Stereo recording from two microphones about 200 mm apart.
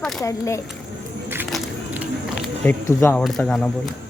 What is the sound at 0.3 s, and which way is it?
Speech, 15° left (ahead or behind).